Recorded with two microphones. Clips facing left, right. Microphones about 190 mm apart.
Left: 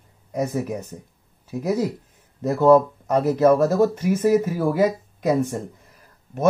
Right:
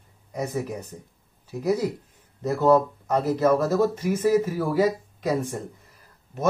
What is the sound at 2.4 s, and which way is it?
Speech, 50° left (ahead or behind).